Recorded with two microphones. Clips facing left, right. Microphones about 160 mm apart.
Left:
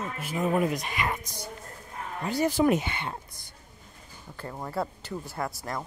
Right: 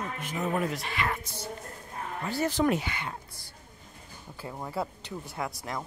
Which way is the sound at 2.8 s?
25° left (ahead or behind).